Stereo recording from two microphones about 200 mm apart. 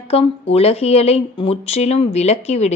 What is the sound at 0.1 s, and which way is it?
Speech, 30° left (ahead or behind).